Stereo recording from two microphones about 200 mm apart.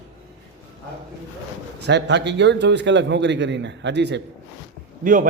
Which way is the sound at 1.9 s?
60° right (ahead or behind).